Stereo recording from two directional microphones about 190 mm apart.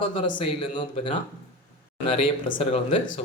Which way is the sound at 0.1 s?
25° left (ahead or behind).